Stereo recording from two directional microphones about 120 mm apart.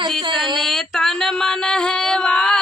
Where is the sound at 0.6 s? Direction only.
Centre (ahead or behind).